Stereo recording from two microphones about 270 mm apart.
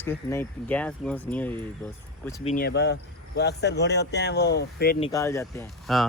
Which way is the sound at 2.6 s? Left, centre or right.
Left.